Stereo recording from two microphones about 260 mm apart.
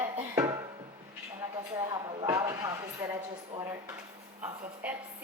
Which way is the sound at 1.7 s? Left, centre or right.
Centre.